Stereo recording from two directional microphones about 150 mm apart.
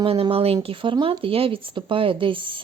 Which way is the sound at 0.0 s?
40° right (ahead or behind).